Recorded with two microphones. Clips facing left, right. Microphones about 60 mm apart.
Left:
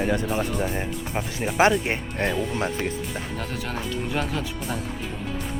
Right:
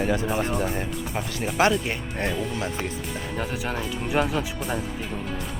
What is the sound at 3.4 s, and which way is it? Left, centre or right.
Speech, centre.